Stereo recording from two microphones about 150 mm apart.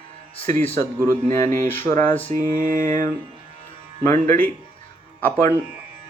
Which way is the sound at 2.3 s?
65° right (ahead or behind).